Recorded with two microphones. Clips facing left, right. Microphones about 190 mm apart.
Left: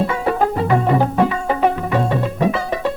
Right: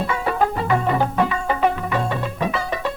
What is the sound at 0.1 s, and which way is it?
Music, 35° left (ahead or behind).